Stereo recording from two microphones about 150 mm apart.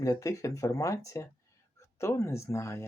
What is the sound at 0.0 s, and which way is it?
Speech, 20° left (ahead or behind).